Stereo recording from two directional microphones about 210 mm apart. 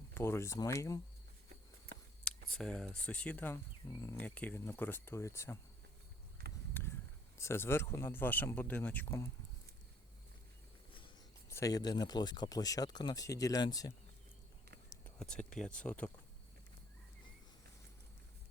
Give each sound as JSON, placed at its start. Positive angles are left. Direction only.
{"t": 0.1, "sound": "speech", "side_deg": 10}
{"t": 2.2, "sound": "speech", "side_deg": 5}
{"t": 6.8, "sound": "a sound", "side_deg": 10}
{"t": 7.3, "sound": "speech", "side_deg": 10}
{"t": 11.4, "sound": "speech", "side_deg": 15}
{"t": 14.8, "sound": "a sound", "side_deg": 5}
{"t": 15.4, "sound": "speech", "side_deg": 5}